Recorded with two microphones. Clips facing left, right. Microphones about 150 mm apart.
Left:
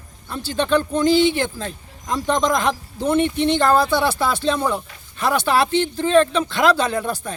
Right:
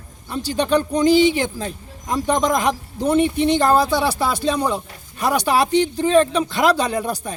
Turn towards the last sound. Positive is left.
turn(degrees=-10)  # may be behind; listen again after turning